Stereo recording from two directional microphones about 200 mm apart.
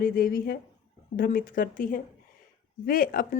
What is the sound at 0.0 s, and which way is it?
Speech, 45° left (ahead or behind).